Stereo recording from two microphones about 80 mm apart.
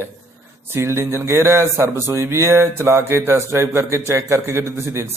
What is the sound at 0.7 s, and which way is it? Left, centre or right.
Speech, right.